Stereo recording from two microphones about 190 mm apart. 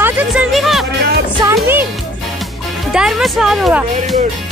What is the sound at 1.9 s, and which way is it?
Speech, centre (ahead or behind).